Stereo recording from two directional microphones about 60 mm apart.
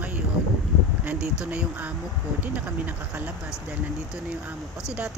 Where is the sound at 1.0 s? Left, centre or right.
Centre.